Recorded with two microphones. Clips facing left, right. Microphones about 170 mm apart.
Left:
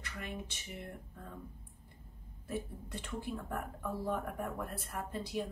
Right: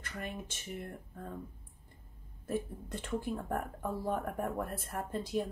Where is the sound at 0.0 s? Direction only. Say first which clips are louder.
Right 2 dB; 50° right (ahead or behind).